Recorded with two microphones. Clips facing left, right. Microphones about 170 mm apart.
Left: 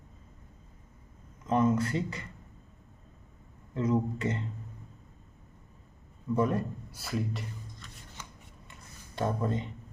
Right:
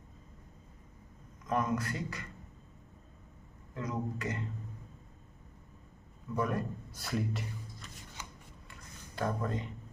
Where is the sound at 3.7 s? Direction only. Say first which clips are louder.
Left 8 dB; 25° left (ahead or behind).